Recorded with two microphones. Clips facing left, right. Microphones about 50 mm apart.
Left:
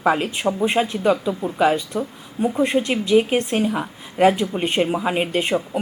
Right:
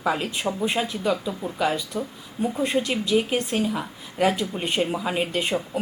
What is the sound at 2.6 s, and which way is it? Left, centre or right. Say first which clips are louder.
A man's voice: left 3 dB; left.